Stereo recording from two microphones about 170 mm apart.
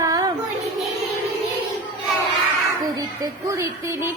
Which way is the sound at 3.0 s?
20° right (ahead or behind).